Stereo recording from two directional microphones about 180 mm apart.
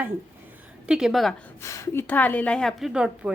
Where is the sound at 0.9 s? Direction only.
5° right (ahead or behind).